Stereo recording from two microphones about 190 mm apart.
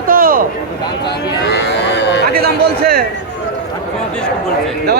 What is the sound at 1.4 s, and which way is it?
Speech, 65° left (ahead or behind).